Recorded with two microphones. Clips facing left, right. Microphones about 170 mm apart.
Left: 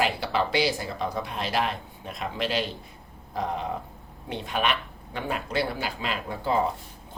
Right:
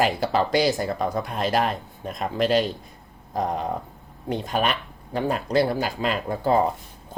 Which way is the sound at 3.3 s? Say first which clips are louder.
Right 4 dB; 45° right (ahead or behind).